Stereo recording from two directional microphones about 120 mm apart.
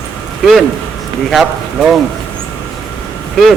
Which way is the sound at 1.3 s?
Centre (ahead or behind).